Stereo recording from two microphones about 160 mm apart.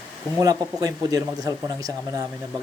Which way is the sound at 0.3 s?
20° right (ahead or behind).